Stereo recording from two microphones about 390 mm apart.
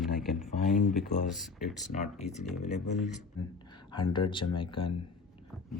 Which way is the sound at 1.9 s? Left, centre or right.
Centre.